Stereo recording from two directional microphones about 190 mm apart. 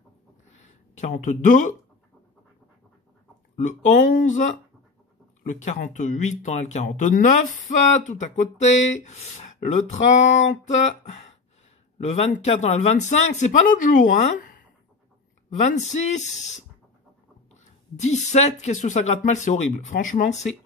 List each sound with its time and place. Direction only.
0.9 s speech: 40° left (ahead or behind)
3.5 s speech: 40° left (ahead or behind)
17.9 s speech: 40° left (ahead or behind)